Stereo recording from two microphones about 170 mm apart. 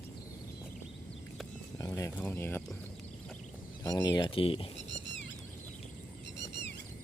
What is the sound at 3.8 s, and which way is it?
Speech, 20° left (ahead or behind).